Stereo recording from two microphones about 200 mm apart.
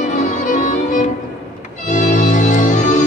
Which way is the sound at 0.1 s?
40° left (ahead or behind).